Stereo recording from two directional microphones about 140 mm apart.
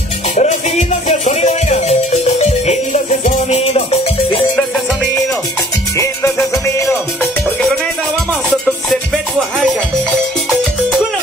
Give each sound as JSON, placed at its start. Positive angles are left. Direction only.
{"t": 0.4, "sound": "music", "side_deg": 55}